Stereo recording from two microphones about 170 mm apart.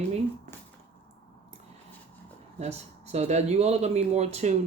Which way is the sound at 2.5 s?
40° right (ahead or behind).